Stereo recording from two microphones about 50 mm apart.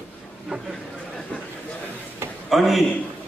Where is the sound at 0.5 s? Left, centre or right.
Right.